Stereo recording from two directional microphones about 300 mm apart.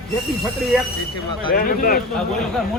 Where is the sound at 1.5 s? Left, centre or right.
Left.